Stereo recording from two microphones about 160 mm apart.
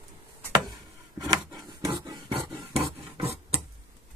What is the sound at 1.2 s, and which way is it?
Filing, 25° right (ahead or behind).